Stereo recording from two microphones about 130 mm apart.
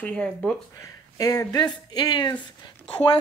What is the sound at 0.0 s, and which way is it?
Speech, 10° left (ahead or behind).